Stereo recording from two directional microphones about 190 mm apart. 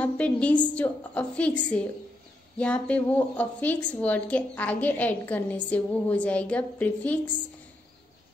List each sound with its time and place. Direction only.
0.0 s a woman's voice: 5° left (ahead or behind)